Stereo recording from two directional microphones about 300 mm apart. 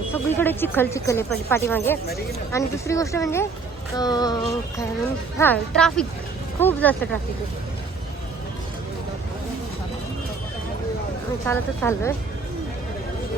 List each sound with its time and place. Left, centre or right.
0.1 s speech: centre
11.4 s speech: centre